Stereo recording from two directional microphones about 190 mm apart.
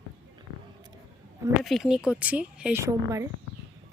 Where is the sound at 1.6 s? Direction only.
Centre (ahead or behind).